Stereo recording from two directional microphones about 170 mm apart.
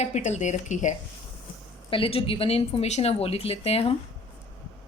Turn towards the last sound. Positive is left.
turn(degrees=35)  # may be behind; listen again after turning